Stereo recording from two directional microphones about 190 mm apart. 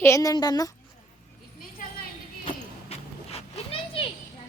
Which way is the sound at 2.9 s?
30° left (ahead or behind).